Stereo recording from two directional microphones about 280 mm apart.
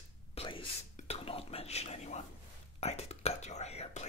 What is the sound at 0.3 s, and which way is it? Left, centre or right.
Whispering, centre.